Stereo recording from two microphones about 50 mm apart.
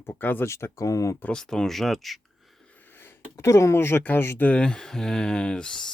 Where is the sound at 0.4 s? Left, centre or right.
Left.